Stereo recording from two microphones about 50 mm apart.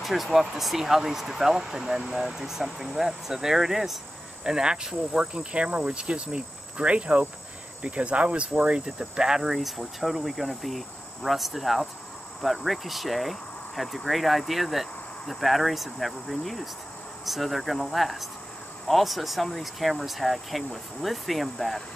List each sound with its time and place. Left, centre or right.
0.0 s speech: centre
4.5 s cricket: centre
8.6 s speech: centre